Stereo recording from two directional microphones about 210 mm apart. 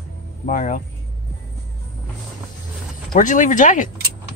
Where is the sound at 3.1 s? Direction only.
40° left (ahead or behind).